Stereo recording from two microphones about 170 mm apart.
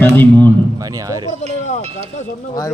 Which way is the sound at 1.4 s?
40° right (ahead or behind).